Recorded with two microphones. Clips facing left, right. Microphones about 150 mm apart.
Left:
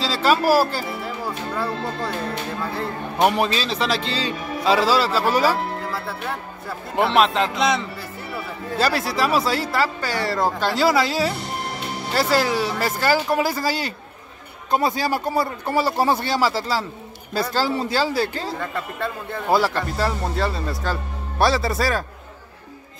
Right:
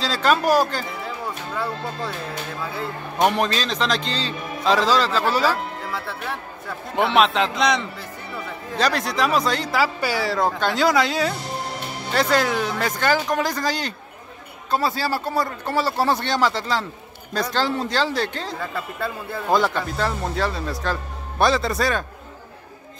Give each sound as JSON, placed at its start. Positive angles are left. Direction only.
{"t": 0.0, "sound": "a man's voice", "side_deg": 5}
{"t": 14.7, "sound": "speech", "side_deg": 15}